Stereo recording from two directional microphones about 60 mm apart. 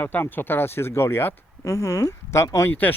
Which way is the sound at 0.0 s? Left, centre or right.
Left.